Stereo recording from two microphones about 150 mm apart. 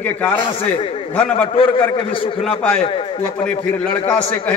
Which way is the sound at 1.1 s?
10° left (ahead or behind).